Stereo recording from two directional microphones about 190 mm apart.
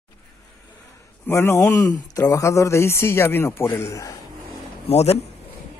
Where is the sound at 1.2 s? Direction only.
15° left (ahead or behind).